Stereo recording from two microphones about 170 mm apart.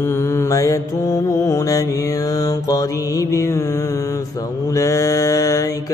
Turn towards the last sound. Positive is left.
turn(degrees=20)  # may be behind; listen again after turning